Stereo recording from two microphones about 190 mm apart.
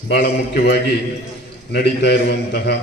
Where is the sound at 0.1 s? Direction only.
60° left (ahead or behind).